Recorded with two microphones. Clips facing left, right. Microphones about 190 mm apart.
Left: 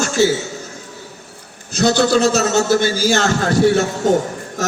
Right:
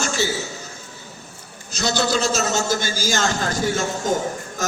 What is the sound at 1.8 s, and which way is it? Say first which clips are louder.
A man's voice: left 8 dB; 60° left (ahead or behind).